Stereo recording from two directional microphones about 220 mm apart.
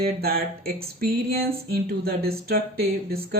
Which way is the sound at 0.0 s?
45° right (ahead or behind).